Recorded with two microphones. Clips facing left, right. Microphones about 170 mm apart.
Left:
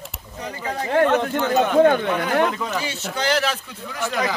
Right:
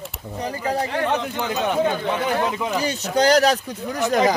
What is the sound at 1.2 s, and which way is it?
Speech, 60° left (ahead or behind).